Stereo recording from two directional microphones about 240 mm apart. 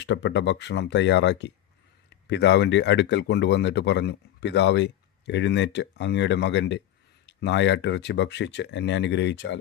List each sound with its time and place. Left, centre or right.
0.0 s speech: left